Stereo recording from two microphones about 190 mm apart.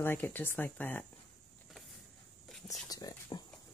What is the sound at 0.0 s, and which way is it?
Speech, 10° left (ahead or behind).